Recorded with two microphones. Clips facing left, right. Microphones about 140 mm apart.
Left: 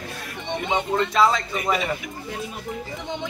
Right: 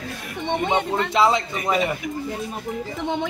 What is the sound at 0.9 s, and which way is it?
Speech, 20° right (ahead or behind).